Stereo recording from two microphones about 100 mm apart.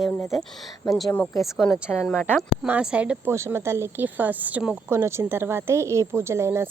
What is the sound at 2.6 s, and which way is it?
Speech, 10° right (ahead or behind).